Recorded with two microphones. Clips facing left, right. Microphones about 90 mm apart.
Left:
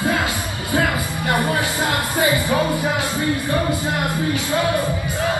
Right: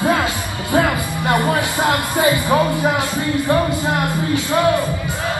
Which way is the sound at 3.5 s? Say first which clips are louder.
Right 4 dB; 25° right (ahead or behind).